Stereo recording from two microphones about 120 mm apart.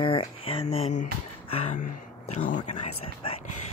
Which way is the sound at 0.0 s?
50° left (ahead or behind).